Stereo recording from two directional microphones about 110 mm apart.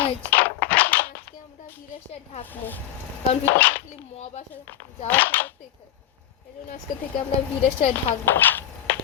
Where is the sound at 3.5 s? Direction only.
20° left (ahead or behind).